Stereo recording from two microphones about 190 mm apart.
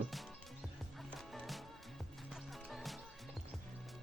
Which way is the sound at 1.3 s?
Centre (ahead or behind).